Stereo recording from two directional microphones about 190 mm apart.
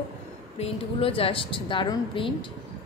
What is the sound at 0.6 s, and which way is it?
Speech, 30° left (ahead or behind).